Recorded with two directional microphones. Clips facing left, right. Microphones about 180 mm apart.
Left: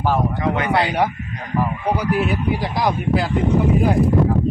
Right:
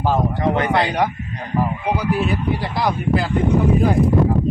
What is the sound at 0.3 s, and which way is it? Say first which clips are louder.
Speech: right 2 dB; 35° right (ahead or behind).